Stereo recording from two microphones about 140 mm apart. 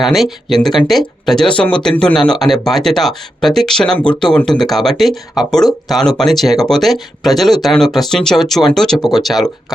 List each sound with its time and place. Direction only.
0.0 s speech: centre (ahead or behind)